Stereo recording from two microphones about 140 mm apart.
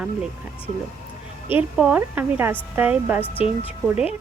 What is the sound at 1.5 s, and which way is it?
Speech, 10° right (ahead or behind).